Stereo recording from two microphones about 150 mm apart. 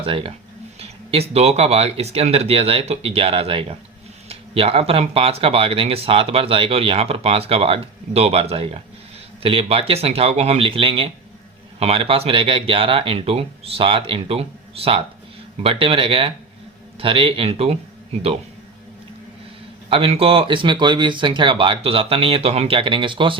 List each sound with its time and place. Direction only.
0.0 s speech: 35° right (ahead or behind)
19.9 s speech: 40° right (ahead or behind)